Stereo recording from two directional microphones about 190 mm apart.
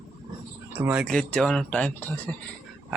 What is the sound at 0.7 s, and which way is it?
Speech, 10° right (ahead or behind).